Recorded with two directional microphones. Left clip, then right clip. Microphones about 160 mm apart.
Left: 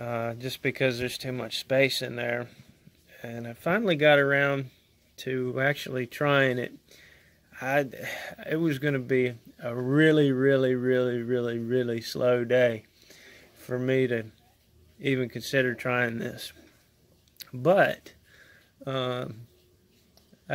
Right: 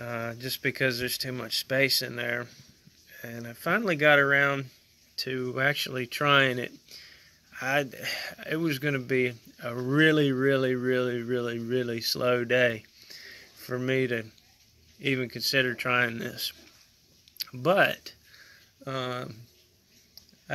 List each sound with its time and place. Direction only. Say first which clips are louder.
0.0 s speech: left 3 dB; 5° left (ahead or behind)
17.5 s speech: left 2 dB; 10° left (ahead or behind)